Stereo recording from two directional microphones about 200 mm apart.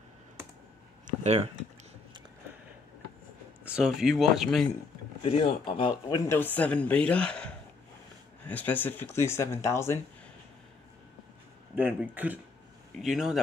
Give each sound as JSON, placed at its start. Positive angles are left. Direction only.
{"t": 1.2, "sound": "speech", "side_deg": -30}
{"t": 3.6, "sound": "speech", "side_deg": -5}
{"t": 5.2, "sound": "speech", "side_deg": 25}
{"t": 11.7, "sound": "speech", "side_deg": -10}